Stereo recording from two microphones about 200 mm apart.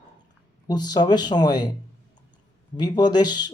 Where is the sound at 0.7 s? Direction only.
20° left (ahead or behind).